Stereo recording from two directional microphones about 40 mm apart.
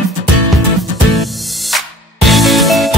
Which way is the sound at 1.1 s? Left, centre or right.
Centre.